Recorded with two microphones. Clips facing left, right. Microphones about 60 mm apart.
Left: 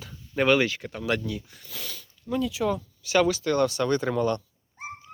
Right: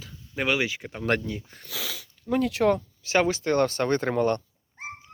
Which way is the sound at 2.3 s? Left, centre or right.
Right.